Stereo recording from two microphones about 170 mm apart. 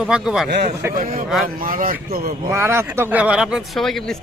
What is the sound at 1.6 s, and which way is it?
Speech, 55° right (ahead or behind).